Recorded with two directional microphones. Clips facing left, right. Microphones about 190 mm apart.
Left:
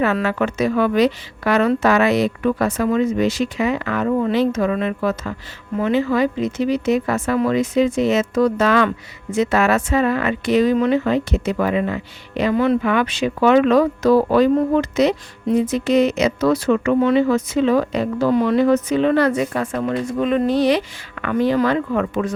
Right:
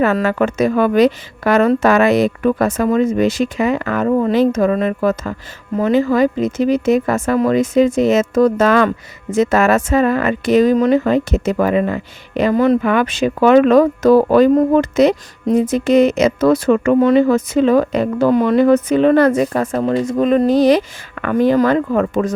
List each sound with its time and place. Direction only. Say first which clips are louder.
0.0 s speech: right 4 dB; 45° right (ahead or behind)
19.8 s speech: right 5 dB; 30° right (ahead or behind)
20.1 s speech: right 5 dB; 40° right (ahead or behind)